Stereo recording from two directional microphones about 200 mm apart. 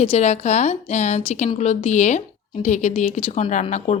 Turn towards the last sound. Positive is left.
turn(degrees=35)  # may be behind; listen again after turning